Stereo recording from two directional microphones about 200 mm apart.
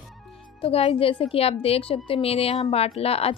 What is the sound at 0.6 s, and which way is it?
A woman's voice, 30° left (ahead or behind).